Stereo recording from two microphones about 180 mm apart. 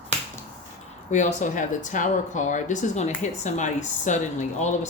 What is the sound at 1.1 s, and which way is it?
Speech, 40° left (ahead or behind).